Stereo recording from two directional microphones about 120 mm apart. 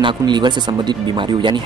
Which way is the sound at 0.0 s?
40° right (ahead or behind).